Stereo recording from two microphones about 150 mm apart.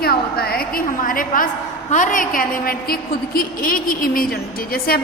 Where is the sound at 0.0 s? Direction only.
90° left; by 1.5 s 65° left (ahead or behind).